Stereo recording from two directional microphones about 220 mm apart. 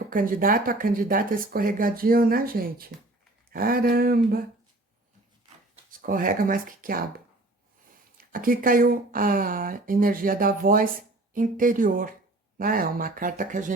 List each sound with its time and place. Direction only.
0.1 s speech: 40° right (ahead or behind)
3.5 s a sound: 40° right (ahead or behind)
6.0 s speech: 40° right (ahead or behind)
8.2 s speech: 40° right (ahead or behind)